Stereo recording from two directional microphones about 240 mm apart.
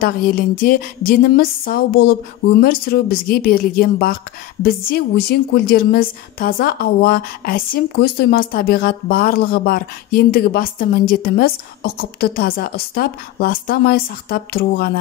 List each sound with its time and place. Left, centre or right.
0.0 s a woman's voice: left